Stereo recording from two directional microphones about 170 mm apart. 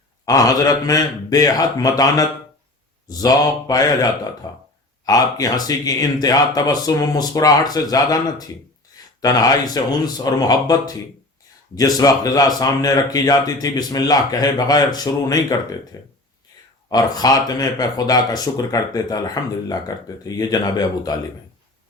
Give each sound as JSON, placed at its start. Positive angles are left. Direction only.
{"t": 0.3, "sound": "speech", "side_deg": 20}